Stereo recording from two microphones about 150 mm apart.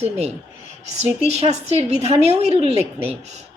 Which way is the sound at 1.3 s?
45° right (ahead or behind).